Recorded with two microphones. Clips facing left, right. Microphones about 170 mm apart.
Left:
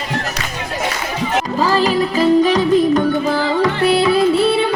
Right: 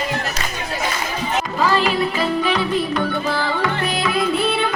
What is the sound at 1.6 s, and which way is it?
Music, 35° left (ahead or behind).